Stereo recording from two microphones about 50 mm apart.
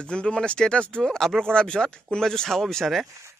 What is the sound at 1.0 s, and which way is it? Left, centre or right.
Speech, centre.